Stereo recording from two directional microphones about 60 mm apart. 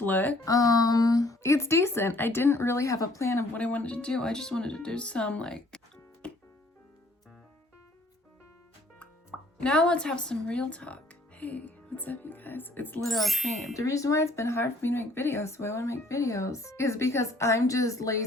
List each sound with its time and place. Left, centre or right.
0.0 s speech: left
0.4 s a sound: left
1.4 s speech: left
3.2 s speech: left
3.5 s speech: left
6.2 s music: centre
9.3 s plop: centre
9.6 s speech: centre
13.0 s speech: centre
13.7 s speech: left